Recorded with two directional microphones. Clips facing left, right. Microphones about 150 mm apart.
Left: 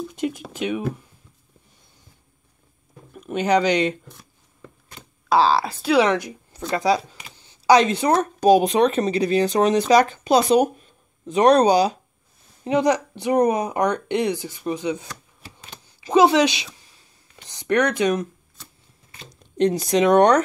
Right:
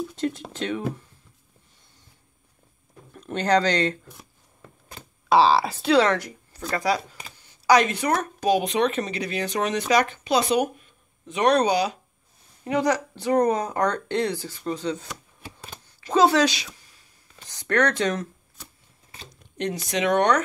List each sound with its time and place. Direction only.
0.1 s music: 15° left (ahead or behind)
0.5 s speech: 10° left (ahead or behind)
3.1 s speech: 10° left (ahead or behind)
5.3 s speech: centre (ahead or behind)
5.9 s a woman's voice: 15° left (ahead or behind); by 12.0 s 35° left (ahead or behind)
12.6 s speech: 20° left (ahead or behind)
16.1 s a woman's voice: 15° left (ahead or behind)
19.5 s speech: 35° left (ahead or behind)